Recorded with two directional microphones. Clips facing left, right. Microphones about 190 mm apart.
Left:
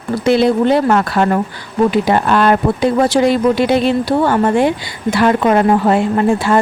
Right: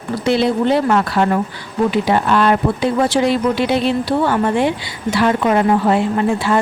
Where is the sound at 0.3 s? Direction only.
50° left (ahead or behind).